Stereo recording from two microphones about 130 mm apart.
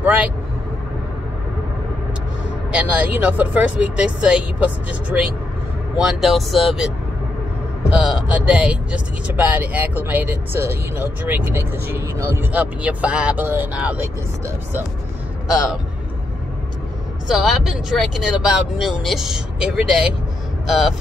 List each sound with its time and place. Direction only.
0.0 s vehicle: 10° right (ahead or behind)
2.7 s speech: 10° right (ahead or behind)
5.9 s speech: 5° right (ahead or behind)
7.9 s speech: 10° right (ahead or behind)
15.4 s speech: 5° right (ahead or behind)
17.4 s speech: 5° right (ahead or behind)